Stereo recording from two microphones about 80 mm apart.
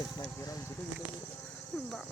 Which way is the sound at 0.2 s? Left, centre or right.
Left.